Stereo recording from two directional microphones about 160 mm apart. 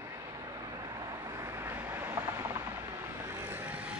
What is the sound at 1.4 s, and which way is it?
Vehicle, 15° right (ahead or behind).